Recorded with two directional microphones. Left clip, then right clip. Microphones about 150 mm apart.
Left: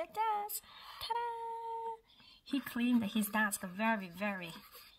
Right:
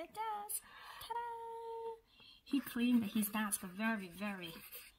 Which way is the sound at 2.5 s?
35° left (ahead or behind).